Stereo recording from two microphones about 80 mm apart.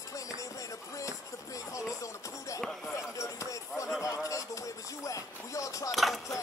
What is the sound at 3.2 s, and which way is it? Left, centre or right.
Speech, left.